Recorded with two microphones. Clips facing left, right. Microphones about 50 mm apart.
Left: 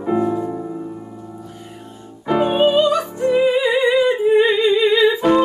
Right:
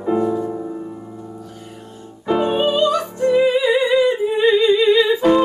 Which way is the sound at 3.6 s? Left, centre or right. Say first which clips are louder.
Even; left.